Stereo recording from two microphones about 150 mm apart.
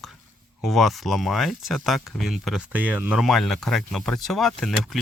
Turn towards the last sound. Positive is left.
turn(degrees=0)  # may be behind; listen again after turning